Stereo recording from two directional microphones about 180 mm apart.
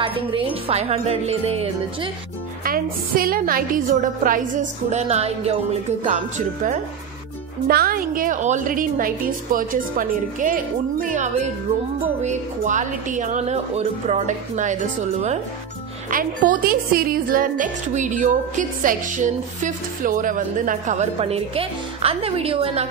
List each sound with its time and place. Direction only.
0.0 s speech: 30° right (ahead or behind)
2.6 s a woman's voice: 55° right (ahead or behind); by 6.1 s 35° right (ahead or behind)
7.6 s a woman's voice: 55° right (ahead or behind)
16.1 s a woman's voice: 50° right (ahead or behind); by 22.8 s 30° right (ahead or behind)